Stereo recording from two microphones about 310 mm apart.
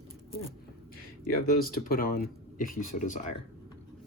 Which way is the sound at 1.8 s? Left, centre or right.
Left.